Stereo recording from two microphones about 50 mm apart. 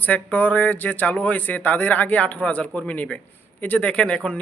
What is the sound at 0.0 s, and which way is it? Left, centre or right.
A man's voice, left.